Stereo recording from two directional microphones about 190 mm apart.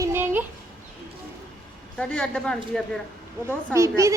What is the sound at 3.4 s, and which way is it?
Speech, 15° right (ahead or behind).